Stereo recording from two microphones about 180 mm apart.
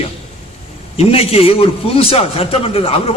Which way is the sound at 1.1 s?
35° left (ahead or behind).